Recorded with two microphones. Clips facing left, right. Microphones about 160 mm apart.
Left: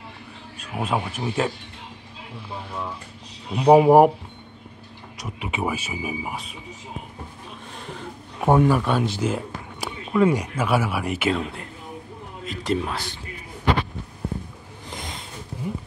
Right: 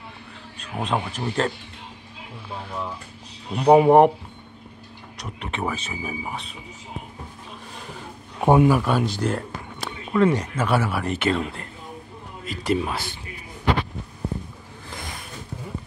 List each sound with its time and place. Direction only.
0.6 s speech: 5° left (ahead or behind)
3.5 s speech: 5° left (ahead or behind)
5.2 s speech: 5° left (ahead or behind)
8.5 s speech: 10° right (ahead or behind)
14.9 s a sound: 20° left (ahead or behind)